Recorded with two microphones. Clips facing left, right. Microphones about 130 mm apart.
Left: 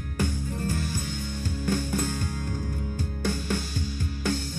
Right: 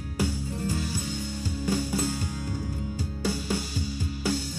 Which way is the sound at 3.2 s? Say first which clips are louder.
Even; 10° right (ahead or behind).